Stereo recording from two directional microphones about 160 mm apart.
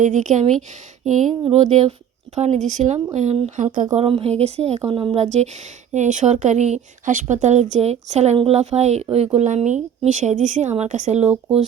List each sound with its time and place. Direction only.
0.0 s speech: 50° right (ahead or behind)
3.9 s speech: 40° right (ahead or behind)